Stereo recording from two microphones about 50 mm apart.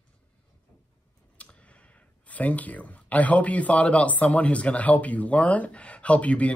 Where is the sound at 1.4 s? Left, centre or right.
Left.